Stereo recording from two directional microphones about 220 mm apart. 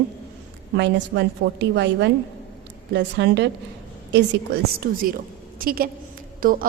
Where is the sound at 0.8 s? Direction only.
50° right (ahead or behind).